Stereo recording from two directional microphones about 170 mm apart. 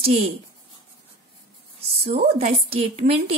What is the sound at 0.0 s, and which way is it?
Speech, 40° right (ahead or behind).